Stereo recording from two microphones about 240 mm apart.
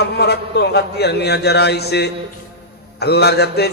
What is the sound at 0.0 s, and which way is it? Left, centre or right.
Speech, left.